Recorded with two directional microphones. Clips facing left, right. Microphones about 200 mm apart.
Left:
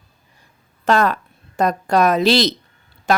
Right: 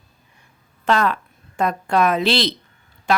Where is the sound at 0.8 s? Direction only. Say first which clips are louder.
Left 2 dB; 45° left (ahead or behind).